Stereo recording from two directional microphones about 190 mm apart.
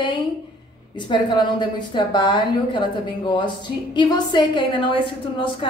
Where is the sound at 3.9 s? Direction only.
20° left (ahead or behind).